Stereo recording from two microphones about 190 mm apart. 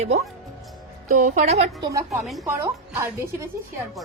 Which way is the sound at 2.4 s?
15° right (ahead or behind).